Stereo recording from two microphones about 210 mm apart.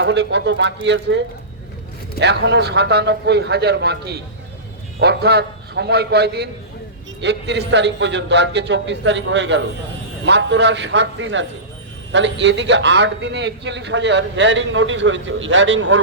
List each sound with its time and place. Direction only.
0.0 s a man's voice: 55° right (ahead or behind)